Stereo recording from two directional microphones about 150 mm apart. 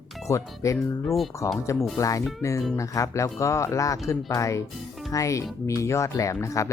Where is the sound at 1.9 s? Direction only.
25° left (ahead or behind).